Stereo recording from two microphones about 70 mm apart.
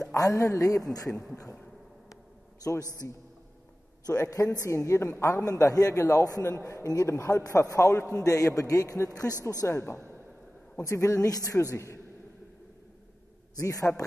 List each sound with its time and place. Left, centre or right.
0.1 s a woman's voice: left
2.6 s a woman's voice: left
9.7 s a woman's voice: left
10.8 s a man's voice: left
13.6 s a man's voice: left